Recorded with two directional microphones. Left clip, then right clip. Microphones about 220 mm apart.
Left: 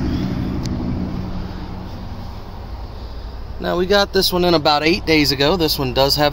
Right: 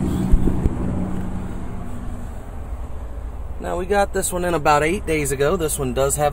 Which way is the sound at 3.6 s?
55° left (ahead or behind).